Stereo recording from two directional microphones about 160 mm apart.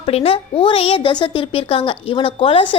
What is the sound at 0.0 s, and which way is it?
A woman's voice, 35° left (ahead or behind).